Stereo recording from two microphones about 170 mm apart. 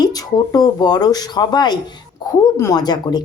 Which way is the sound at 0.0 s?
20° left (ahead or behind).